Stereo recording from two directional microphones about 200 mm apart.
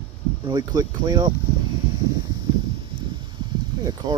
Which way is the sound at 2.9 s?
25° right (ahead or behind).